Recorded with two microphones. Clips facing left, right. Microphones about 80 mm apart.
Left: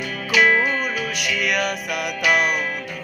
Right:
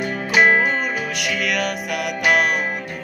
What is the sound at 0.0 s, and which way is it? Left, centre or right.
Music, right.